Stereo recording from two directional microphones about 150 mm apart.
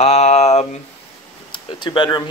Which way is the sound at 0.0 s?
45° left (ahead or behind).